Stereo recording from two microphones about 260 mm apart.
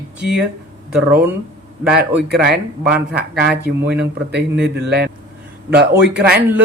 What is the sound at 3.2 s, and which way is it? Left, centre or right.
Speech, right.